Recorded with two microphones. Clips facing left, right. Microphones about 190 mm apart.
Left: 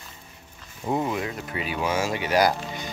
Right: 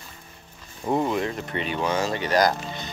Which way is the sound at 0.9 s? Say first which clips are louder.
Right 2 dB; 5° left (ahead or behind).